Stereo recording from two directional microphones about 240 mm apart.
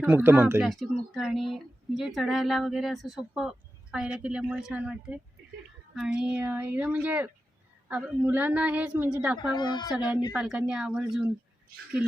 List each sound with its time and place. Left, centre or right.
0.0 s speech: centre
9.4 s speech: centre
9.9 s speech: centre